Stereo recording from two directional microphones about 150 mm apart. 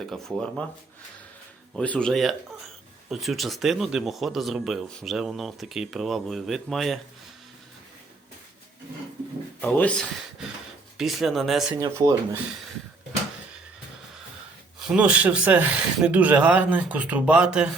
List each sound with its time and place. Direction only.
0.1 s speech: centre (ahead or behind)
1.7 s speech: 5° left (ahead or behind)
9.6 s speech: 10° left (ahead or behind)
10.9 s speech: centre (ahead or behind)
11.7 s speech: 20° right (ahead or behind)
14.8 s speech: 5° right (ahead or behind)